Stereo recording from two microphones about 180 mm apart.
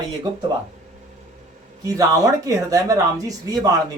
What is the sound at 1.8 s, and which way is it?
Speech, 20° right (ahead or behind).